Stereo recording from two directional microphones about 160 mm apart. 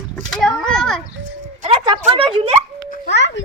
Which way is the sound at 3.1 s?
90° left.